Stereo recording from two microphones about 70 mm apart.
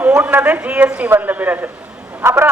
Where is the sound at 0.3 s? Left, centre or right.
Right.